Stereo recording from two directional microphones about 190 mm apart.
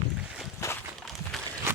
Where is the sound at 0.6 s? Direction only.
15° left (ahead or behind).